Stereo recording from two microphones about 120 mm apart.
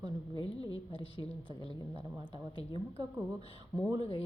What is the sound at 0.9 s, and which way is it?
Speech, 45° left (ahead or behind).